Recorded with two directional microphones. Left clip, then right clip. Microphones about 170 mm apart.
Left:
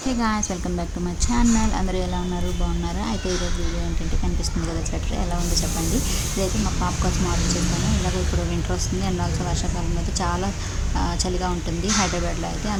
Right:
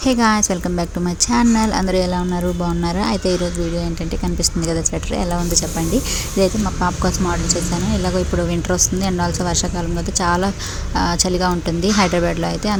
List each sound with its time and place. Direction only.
0.1 s a woman's voice: 30° right (ahead or behind)
4.8 s a woman's voice: 25° right (ahead or behind)
8.7 s a woman's voice: 30° right (ahead or behind)